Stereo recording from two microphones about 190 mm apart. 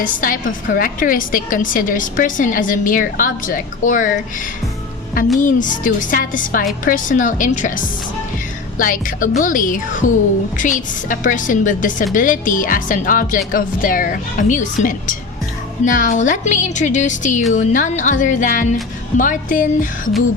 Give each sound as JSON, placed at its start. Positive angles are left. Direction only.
{"t": 0.0, "sound": "a woman's voice", "side_deg": 45}
{"t": 5.4, "sound": "a woman's voice", "side_deg": 45}